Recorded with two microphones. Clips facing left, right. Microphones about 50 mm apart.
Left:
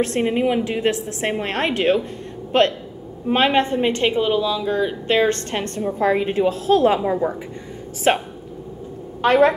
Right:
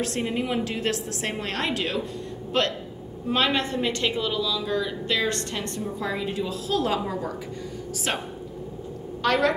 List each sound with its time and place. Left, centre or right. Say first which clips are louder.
0.0 s a woman's voice: left 8 dB; left